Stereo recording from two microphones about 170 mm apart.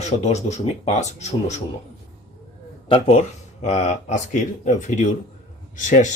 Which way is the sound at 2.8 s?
35° left (ahead or behind).